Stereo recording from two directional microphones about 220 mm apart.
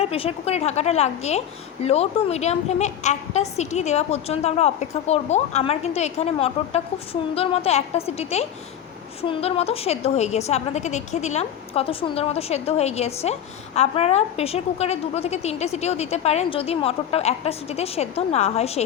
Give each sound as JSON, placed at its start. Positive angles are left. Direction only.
{"t": 0.0, "sound": "a woman's voice", "side_deg": 25}